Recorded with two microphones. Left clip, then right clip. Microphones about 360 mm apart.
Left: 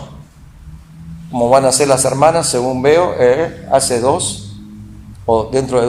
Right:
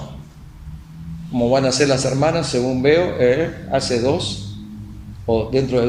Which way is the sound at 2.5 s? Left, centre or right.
Left.